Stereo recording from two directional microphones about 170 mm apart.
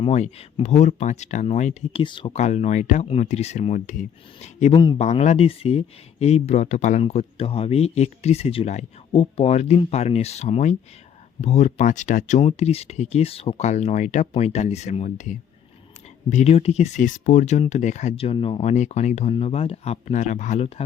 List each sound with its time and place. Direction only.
0.0 s speech: 40° left (ahead or behind)
2.3 s speech: 40° left (ahead or behind)
4.7 s speech: 25° left (ahead or behind)
4.9 s speech: 40° left (ahead or behind)